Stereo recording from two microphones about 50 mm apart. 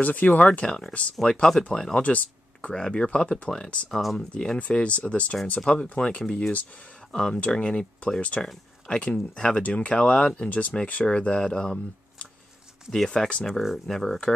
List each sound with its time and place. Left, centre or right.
0.0 s speech: left
0.7 s speech: centre
2.0 s speech: left; by 4.3 s centre
4.3 s speech: centre
4.6 s speech: left
6.2 s speech: centre
13.5 s speech: centre
13.9 s speech: centre